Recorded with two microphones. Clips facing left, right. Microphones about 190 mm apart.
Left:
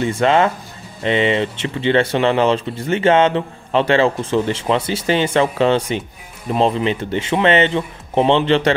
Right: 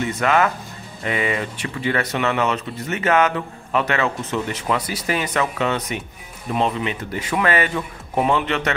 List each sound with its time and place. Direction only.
0.0 s speech: 30° left (ahead or behind)